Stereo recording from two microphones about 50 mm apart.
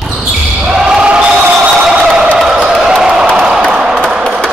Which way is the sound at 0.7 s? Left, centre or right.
Centre.